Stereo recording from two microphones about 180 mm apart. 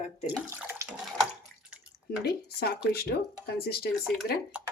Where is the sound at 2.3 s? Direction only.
60° left (ahead or behind).